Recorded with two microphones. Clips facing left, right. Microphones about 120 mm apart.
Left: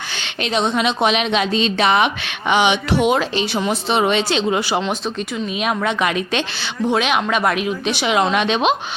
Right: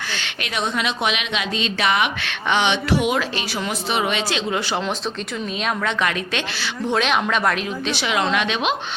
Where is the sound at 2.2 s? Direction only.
15° left (ahead or behind).